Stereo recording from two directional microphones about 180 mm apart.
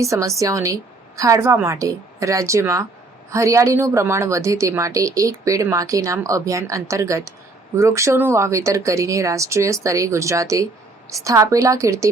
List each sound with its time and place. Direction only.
0.0 s a woman's voice: 15° right (ahead or behind)